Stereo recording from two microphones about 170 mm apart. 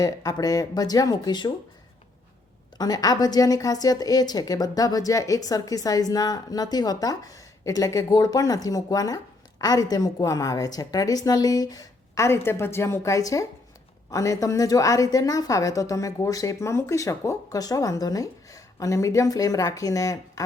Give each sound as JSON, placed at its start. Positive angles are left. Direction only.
{"t": 0.0, "sound": "a woman's voice", "side_deg": 20}
{"t": 2.7, "sound": "a woman's voice", "side_deg": 20}